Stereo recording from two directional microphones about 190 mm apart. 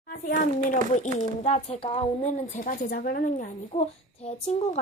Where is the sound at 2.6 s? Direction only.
50° left (ahead or behind).